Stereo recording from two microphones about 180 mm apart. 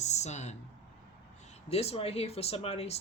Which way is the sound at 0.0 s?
40° left (ahead or behind).